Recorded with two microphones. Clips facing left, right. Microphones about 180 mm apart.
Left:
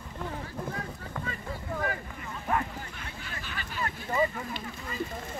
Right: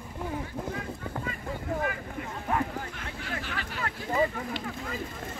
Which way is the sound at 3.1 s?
75° right (ahead or behind).